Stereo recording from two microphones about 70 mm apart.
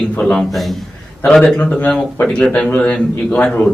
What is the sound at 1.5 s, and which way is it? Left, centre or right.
A man's voice, centre.